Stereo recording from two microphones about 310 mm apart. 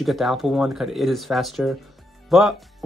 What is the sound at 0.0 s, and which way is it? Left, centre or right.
Speech, centre.